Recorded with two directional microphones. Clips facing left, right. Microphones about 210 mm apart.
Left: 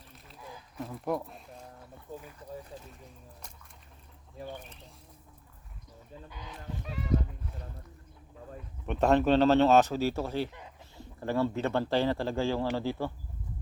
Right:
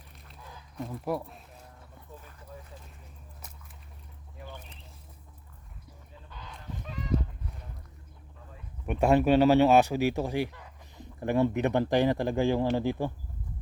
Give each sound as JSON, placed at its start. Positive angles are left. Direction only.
{"t": 0.8, "sound": "speech", "side_deg": 0}
{"t": 6.3, "sound": "chicken", "side_deg": 10}
{"t": 8.9, "sound": "speech", "side_deg": -10}